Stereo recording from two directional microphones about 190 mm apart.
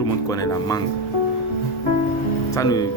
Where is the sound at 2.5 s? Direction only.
20° left (ahead or behind).